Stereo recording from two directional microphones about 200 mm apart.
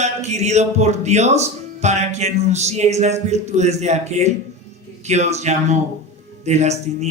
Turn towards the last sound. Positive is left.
turn(degrees=-35)  # may be behind; listen again after turning